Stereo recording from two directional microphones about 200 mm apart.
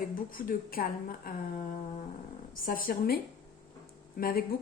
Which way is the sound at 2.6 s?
45° left (ahead or behind).